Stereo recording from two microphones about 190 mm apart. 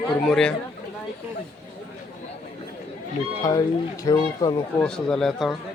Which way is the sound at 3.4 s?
20° left (ahead or behind).